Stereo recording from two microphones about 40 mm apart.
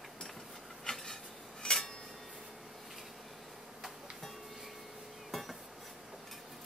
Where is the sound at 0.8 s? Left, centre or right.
Centre.